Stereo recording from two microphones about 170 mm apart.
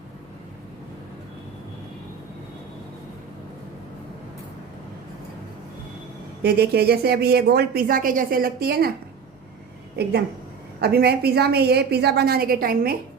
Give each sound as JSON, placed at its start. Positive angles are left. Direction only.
{"t": 6.4, "sound": "a woman's voice", "side_deg": -70}
{"t": 10.0, "sound": "a woman's voice", "side_deg": -75}